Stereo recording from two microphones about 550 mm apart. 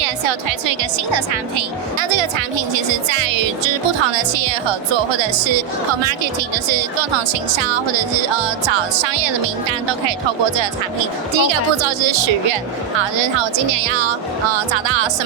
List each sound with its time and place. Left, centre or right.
0.0 s speech: right
6.7 s speech: right
11.3 s speech: right